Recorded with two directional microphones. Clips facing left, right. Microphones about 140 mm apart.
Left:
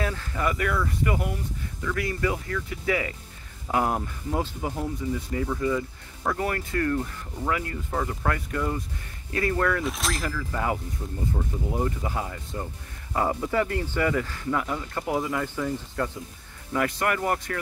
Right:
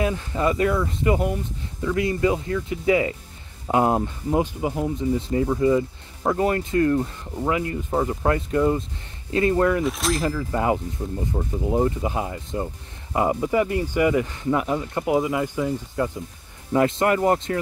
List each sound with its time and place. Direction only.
0.0 s speech: 20° right (ahead or behind)
9.8 s speech: centre (ahead or behind)
10.2 s speech: 25° right (ahead or behind)